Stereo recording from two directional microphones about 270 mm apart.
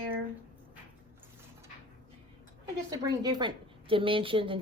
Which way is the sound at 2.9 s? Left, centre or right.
Centre.